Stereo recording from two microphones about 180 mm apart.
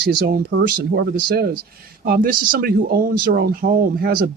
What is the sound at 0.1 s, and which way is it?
Speech, 55° right (ahead or behind).